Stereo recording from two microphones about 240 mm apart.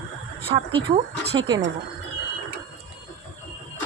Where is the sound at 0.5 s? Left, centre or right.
Right.